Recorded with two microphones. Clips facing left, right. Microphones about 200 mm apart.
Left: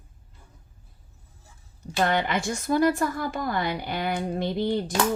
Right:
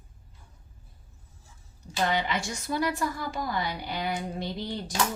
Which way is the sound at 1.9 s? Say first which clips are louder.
Left 4 dB; 55° left (ahead or behind).